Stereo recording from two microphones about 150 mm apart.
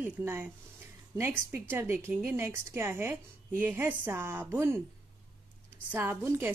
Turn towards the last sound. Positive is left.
turn(degrees=-15)  # may be behind; listen again after turning